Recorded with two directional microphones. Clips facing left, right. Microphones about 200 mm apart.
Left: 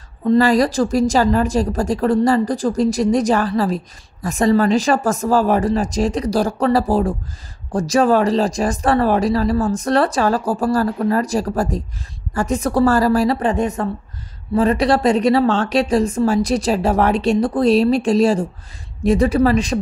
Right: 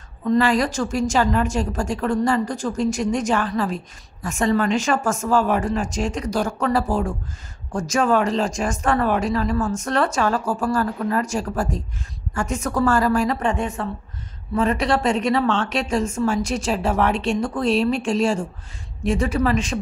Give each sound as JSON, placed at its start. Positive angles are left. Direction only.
{"t": 0.2, "sound": "a woman's voice", "side_deg": 35}